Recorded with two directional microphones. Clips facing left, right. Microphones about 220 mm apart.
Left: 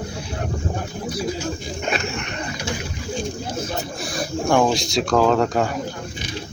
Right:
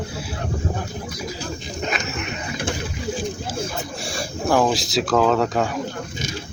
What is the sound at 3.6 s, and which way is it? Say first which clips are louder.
Speech: left 1 dB; 30° right (ahead or behind).